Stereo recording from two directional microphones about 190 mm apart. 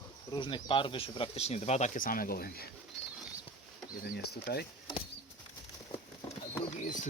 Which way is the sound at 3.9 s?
50° left (ahead or behind).